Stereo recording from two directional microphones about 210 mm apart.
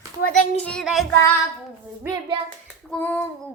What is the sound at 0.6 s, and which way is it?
Speech, 5° left (ahead or behind).